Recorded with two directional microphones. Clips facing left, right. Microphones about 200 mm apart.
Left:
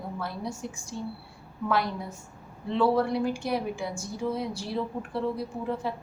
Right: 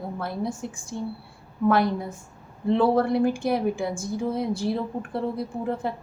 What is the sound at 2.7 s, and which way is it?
A woman's voice, 55° right (ahead or behind).